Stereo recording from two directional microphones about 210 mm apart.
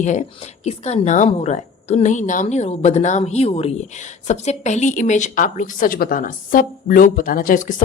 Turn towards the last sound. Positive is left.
turn(degrees=40)  # may be behind; listen again after turning